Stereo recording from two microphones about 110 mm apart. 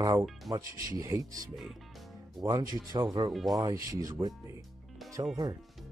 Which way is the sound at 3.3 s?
Centre (ahead or behind).